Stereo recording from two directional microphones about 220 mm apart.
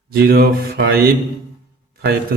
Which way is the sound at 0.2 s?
45° right (ahead or behind).